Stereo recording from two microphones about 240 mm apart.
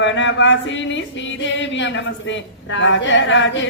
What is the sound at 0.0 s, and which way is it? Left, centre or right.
A woman's voice, left.